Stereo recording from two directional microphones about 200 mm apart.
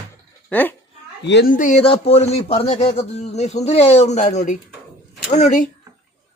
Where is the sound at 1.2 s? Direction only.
55° left (ahead or behind); by 5.6 s 35° left (ahead or behind).